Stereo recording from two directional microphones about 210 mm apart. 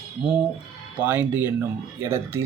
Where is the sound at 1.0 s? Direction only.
10° right (ahead or behind).